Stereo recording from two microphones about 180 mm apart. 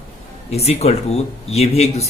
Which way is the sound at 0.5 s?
35° left (ahead or behind).